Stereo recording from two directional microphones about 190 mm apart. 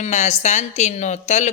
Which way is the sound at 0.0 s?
35° left (ahead or behind).